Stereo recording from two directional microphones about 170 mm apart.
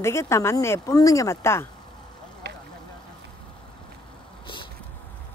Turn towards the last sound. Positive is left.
turn(degrees=30)  # may be behind; listen again after turning